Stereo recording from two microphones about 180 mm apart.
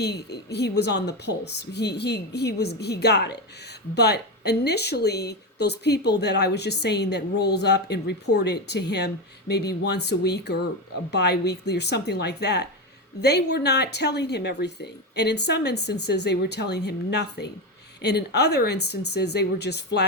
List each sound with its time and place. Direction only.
0.0 s speech: 65° left (ahead or behind)